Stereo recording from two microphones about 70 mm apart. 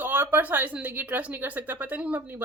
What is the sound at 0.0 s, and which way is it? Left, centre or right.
Speech, right.